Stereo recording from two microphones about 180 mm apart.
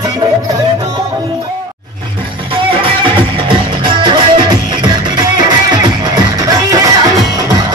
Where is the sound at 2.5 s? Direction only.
25° right (ahead or behind).